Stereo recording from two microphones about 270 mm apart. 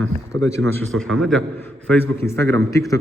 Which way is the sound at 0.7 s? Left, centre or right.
Centre.